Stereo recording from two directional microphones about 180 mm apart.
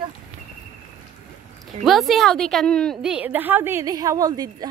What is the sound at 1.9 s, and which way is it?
A woman's voice, centre (ahead or behind).